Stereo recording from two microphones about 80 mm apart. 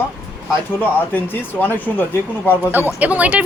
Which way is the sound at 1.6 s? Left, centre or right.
Left.